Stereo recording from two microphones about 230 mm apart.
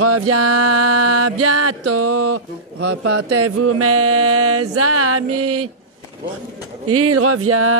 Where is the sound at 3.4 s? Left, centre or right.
Right.